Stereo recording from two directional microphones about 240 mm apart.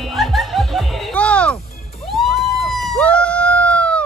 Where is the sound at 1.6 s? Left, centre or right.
Left.